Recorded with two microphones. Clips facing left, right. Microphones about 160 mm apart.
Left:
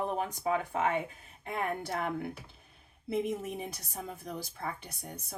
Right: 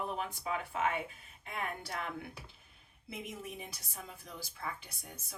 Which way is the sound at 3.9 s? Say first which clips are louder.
Left 8 dB; 50° left (ahead or behind).